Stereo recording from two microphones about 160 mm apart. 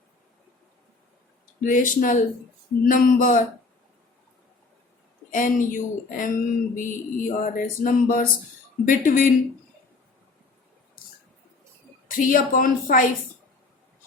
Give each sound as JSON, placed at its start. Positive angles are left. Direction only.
{"t": 1.6, "sound": "speech", "side_deg": 55}
{"t": 5.3, "sound": "speech", "side_deg": 55}
{"t": 12.0, "sound": "speech", "side_deg": 60}